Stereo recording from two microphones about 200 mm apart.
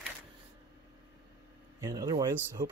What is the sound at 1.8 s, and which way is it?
Speech, 20° right (ahead or behind).